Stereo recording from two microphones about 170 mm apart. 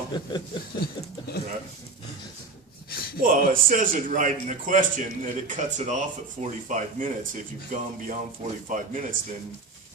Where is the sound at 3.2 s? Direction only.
55° right (ahead or behind).